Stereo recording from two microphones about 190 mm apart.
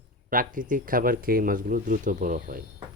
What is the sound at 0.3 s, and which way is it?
Speech, 45° right (ahead or behind).